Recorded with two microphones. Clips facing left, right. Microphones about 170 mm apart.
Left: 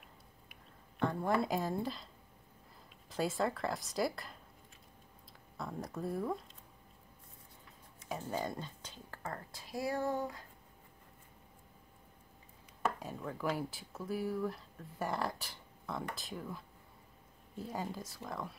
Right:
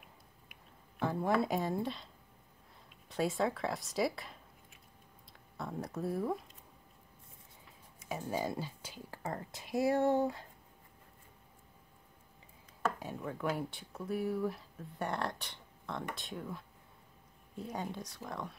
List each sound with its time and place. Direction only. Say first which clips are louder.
0.9 s speech: right 1 dB; 5° right (ahead or behind)
3.1 s speech: right 2 dB; centre (ahead or behind)
5.6 s speech: right 2 dB; centre (ahead or behind)
8.1 s speech: right 2 dB; 5° right (ahead or behind)
9.2 s speech: right 3 dB; 20° right (ahead or behind)
12.8 s speech: right 1 dB; centre (ahead or behind)